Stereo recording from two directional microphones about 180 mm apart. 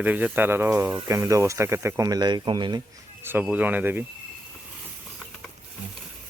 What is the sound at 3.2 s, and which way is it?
Speech, 10° right (ahead or behind).